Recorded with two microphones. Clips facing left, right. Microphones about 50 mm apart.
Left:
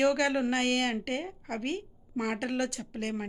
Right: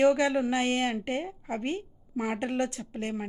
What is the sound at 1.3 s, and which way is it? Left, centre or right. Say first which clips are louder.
A woman's voice: right 2 dB; right.